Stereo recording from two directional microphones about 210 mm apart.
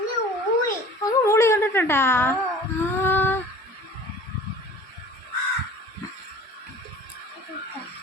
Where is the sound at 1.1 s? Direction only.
15° left (ahead or behind).